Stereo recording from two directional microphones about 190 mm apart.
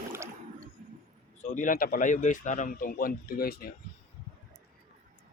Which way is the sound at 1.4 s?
40° left (ahead or behind).